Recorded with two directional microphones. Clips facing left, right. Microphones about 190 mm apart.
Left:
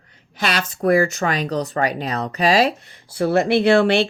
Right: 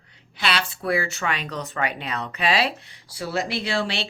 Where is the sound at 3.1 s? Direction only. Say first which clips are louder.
Left 10 dB; 55° left (ahead or behind).